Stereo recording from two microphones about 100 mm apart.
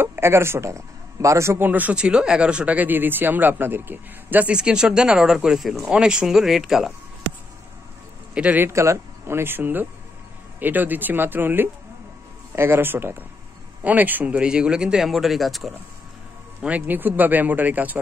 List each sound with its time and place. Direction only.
0.0 s a man's voice: 25° right (ahead or behind)
1.7 s speech: 15° right (ahead or behind)
8.4 s speech: 15° right (ahead or behind)
8.6 s speech: 30° right (ahead or behind); by 15.7 s centre (ahead or behind)
16.6 s speech: 15° right (ahead or behind)